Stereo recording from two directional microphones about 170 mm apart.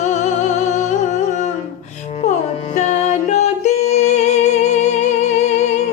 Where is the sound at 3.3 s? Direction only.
45° left (ahead or behind).